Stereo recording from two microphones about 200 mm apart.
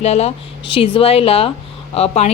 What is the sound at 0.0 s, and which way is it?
A woman's voice, 30° left (ahead or behind).